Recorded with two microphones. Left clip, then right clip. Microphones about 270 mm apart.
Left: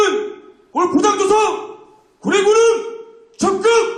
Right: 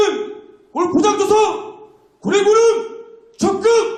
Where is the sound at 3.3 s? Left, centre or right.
Left.